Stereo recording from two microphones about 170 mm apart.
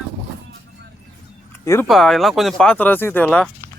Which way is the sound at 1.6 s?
20° left (ahead or behind).